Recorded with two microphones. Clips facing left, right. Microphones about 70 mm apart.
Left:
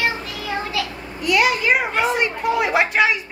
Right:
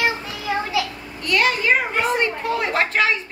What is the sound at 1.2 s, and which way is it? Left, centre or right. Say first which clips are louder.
Speech: left 2 dB; centre.